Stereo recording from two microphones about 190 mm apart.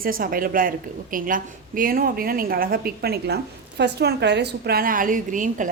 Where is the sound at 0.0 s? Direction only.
50° right (ahead or behind).